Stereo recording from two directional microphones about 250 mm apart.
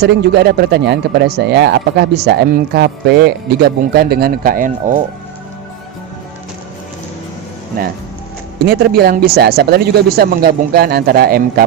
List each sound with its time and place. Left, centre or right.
0.0 s speech: right
8.6 s speech: right